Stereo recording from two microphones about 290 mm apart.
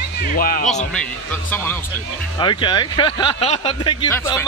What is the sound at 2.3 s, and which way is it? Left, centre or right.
Speech, centre.